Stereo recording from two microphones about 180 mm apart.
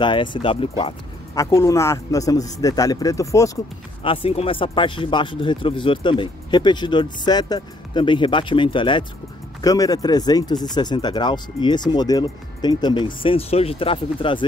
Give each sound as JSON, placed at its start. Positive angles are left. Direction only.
{"t": 0.0, "sound": "speech", "side_deg": 25}
{"t": 4.0, "sound": "speech", "side_deg": 30}